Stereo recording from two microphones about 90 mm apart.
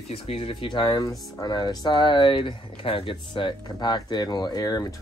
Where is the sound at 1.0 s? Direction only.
45° left (ahead or behind); by 3.6 s 65° left (ahead or behind).